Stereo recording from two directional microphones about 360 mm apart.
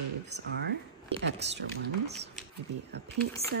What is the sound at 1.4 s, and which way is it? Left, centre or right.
Speech, right.